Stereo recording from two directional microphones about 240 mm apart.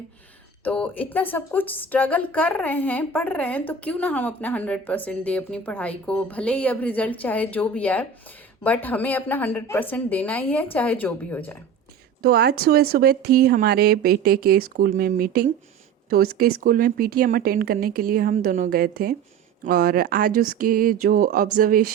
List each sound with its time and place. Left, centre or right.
0.6 s speech: centre
12.2 s speech: right